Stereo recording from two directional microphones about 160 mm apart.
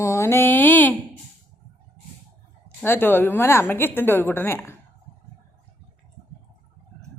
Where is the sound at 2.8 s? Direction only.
15° left (ahead or behind).